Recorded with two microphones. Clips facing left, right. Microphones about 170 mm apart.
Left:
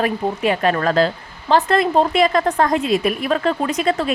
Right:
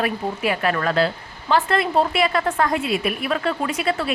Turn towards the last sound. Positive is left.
turn(degrees=40)  # may be behind; listen again after turning